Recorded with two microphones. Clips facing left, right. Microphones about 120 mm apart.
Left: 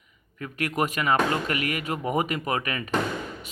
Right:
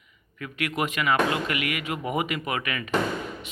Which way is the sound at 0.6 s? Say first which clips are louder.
Left 1 dB; 40° left (ahead or behind).